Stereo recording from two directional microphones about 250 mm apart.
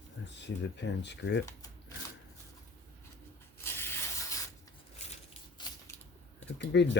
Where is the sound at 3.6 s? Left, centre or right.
Centre.